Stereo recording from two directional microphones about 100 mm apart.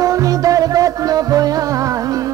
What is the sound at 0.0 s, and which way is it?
Music, 35° right (ahead or behind).